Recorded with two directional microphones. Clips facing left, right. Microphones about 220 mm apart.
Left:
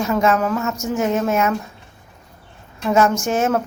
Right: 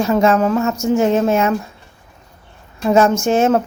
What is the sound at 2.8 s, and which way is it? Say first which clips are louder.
Speech: right 4 dB; 30° right (ahead or behind).